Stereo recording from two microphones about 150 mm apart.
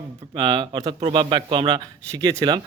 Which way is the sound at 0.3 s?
35° right (ahead or behind).